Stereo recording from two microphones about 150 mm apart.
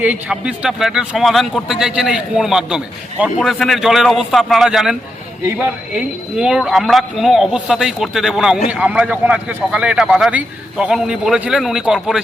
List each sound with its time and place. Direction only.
0.0 s speech: 10° right (ahead or behind)